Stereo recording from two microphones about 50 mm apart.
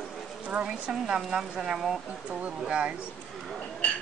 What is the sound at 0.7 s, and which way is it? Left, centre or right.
Speech, centre.